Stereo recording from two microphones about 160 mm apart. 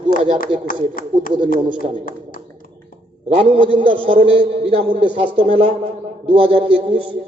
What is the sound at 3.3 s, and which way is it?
A man's voice, 35° right (ahead or behind).